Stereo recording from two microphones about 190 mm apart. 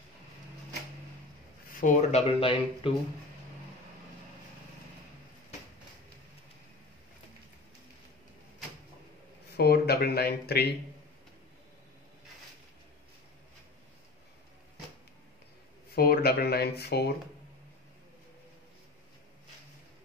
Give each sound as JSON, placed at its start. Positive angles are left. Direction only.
{"t": 1.8, "sound": "speech", "side_deg": 40}
{"t": 9.6, "sound": "speech", "side_deg": 55}
{"t": 15.9, "sound": "speech", "side_deg": 55}